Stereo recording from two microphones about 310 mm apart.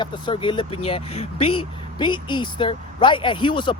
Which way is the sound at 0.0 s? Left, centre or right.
Centre.